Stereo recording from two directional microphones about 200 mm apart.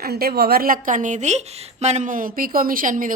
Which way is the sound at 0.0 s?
50° right (ahead or behind).